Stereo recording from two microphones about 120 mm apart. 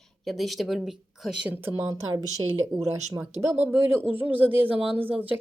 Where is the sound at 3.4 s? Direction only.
15° right (ahead or behind).